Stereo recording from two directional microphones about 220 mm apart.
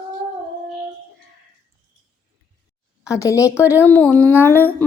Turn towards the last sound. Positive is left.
turn(degrees=10)  # may be behind; listen again after turning